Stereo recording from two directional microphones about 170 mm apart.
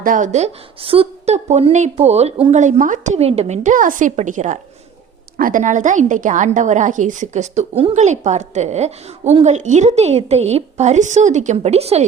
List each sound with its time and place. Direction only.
0.0 s a woman's voice: 50° right (ahead or behind)